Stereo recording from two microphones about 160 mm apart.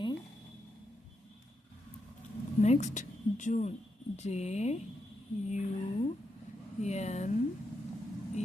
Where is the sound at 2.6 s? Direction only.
45° left (ahead or behind).